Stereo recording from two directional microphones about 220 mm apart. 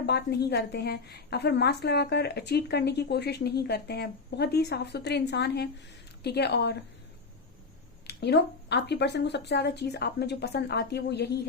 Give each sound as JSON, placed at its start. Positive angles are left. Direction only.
{"t": 0.0, "sound": "a woman's voice", "side_deg": 50}
{"t": 8.0, "sound": "a woman's voice", "side_deg": 50}